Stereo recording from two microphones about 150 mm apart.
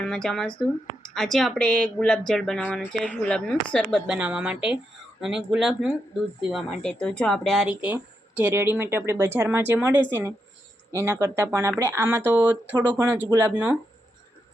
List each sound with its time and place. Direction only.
0.0 s speech: 5° left (ahead or behind)
7.7 s speech: 10° right (ahead or behind)